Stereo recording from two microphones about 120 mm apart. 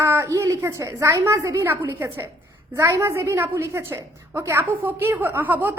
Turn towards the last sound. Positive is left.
turn(degrees=-15)  # may be behind; listen again after turning